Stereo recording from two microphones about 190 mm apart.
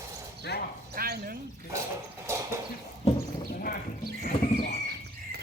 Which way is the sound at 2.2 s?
15° right (ahead or behind).